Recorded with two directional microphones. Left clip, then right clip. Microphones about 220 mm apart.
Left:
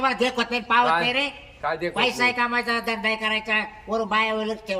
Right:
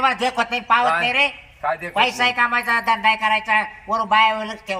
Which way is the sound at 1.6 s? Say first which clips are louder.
Right 3 dB; 20° left (ahead or behind).